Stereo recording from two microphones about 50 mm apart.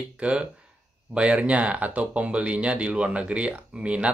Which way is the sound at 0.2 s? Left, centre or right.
Right.